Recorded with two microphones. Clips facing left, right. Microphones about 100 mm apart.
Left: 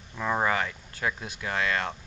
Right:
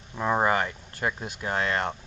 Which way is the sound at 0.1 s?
20° right (ahead or behind).